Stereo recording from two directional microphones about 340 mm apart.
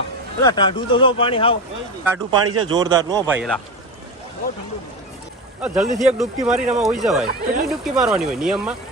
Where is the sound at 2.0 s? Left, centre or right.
Centre.